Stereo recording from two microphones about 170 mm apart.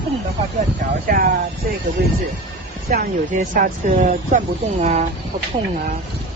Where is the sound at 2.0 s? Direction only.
70° right (ahead or behind).